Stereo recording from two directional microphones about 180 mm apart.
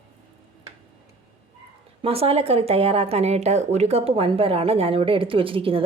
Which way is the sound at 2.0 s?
35° right (ahead or behind).